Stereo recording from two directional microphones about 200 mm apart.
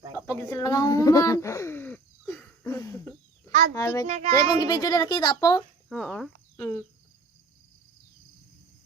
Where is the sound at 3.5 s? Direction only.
45° right (ahead or behind).